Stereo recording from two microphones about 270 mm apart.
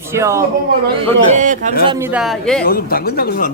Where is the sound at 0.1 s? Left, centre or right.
Centre.